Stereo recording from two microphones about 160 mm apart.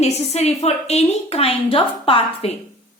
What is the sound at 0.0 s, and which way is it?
A woman's voice, 40° left (ahead or behind).